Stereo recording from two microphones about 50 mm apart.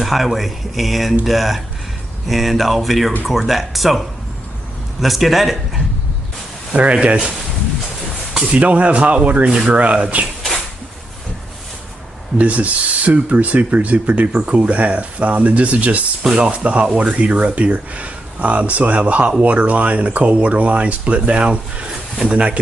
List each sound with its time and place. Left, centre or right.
0.0 s speech: centre
6.7 s speech: right
8.3 s a sound: centre
8.5 s speech: right
12.4 s speech: right